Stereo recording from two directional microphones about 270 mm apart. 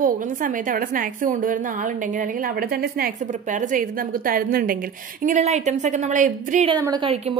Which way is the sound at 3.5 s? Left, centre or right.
Right.